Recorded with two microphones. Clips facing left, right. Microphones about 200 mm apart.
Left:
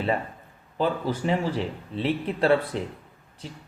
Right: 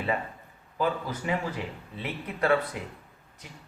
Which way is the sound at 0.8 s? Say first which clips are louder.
Left 4 dB; 30° left (ahead or behind).